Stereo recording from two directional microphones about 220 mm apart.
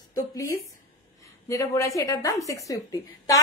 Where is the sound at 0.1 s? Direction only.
15° left (ahead or behind).